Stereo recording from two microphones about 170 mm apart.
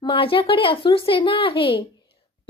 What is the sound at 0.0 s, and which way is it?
A child's voice, 30° left (ahead or behind).